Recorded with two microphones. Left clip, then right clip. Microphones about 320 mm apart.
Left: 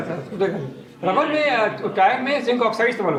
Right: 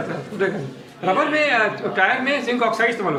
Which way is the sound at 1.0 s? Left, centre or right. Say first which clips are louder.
Right 1 dB; centre.